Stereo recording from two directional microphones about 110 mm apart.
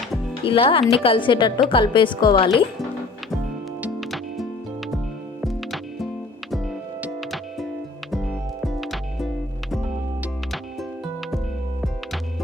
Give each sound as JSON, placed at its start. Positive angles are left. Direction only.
{"t": 0.4, "sound": "a woman's voice", "side_deg": 55}
{"t": 4.0, "sound": "music", "side_deg": 0}
{"t": 7.2, "sound": "music", "side_deg": 0}